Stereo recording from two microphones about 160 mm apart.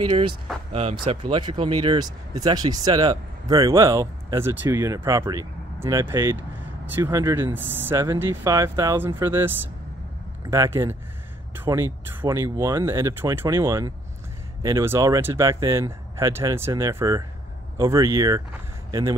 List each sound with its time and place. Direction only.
0.0 s speech: 30° right (ahead or behind)
0.5 s speech: centre (ahead or behind)
0.9 s speech: 30° right (ahead or behind); by 9.5 s 15° right (ahead or behind)
10.5 s speech: 20° right (ahead or behind)